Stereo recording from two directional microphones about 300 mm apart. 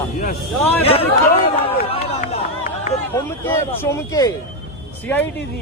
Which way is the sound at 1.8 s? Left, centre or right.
Centre.